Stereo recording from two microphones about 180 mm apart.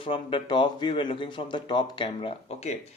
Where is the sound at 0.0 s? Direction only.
30° left (ahead or behind).